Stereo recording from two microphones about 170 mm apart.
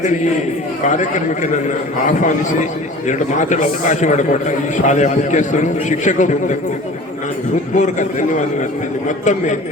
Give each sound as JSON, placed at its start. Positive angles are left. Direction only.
{"t": 0.9, "sound": "a man's voice", "side_deg": 45}
{"t": 7.8, "sound": "a man's voice", "side_deg": 45}